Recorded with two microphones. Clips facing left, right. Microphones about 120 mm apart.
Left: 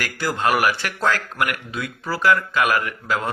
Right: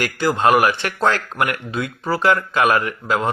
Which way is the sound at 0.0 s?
25° right (ahead or behind).